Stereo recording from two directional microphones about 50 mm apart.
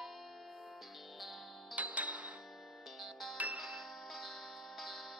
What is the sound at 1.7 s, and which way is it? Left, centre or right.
Music, right.